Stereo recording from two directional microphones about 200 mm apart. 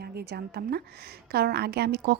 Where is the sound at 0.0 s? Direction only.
55° right (ahead or behind).